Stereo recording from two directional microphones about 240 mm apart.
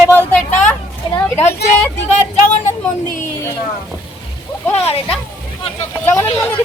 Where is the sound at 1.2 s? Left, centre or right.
Centre.